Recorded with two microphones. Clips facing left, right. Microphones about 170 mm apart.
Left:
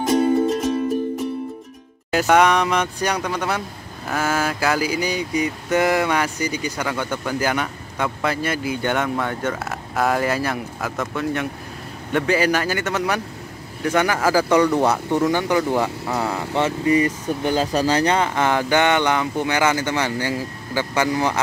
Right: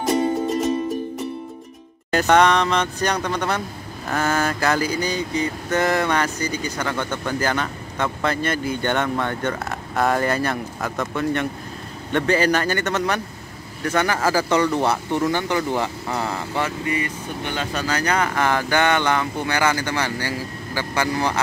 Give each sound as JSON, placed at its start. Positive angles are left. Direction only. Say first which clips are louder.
{"t": 2.0, "sound": "mantra", "louder": "even", "side_deg": 5}
{"t": 16.8, "sound": "speech", "louder": "left 7 dB", "side_deg": 35}